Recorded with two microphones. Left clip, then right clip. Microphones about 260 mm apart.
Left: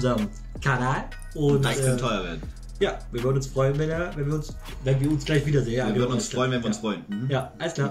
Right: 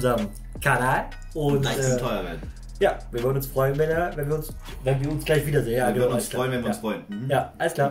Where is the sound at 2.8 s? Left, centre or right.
Centre.